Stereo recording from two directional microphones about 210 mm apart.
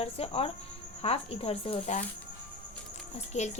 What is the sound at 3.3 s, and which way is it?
Speech, 30° left (ahead or behind).